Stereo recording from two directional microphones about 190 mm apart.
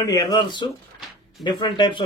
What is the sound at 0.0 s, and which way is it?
A man's voice, 20° left (ahead or behind).